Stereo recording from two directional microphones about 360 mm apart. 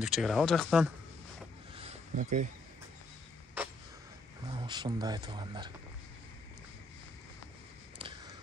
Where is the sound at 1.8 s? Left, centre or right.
Centre.